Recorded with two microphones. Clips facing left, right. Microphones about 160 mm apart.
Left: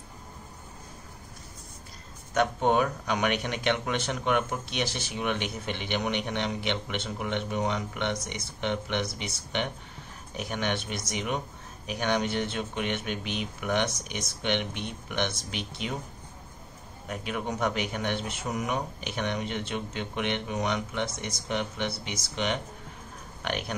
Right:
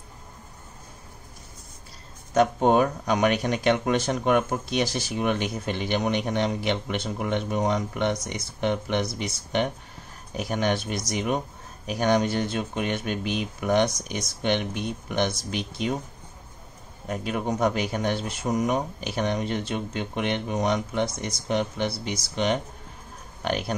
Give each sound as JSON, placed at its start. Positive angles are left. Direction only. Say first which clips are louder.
{"t": 2.3, "sound": "speech", "louder": "right 5 dB", "side_deg": -40}
{"t": 17.1, "sound": "speech", "louder": "right 5 dB", "side_deg": -35}